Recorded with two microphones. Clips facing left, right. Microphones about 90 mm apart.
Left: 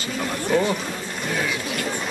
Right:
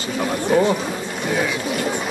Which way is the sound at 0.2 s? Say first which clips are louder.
Right 4 dB; 15° right (ahead or behind).